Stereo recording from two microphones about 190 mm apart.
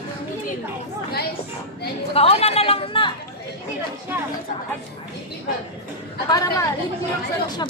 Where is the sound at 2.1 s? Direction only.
30° left (ahead or behind).